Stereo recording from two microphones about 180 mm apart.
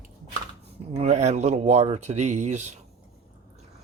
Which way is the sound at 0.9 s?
40° right (ahead or behind).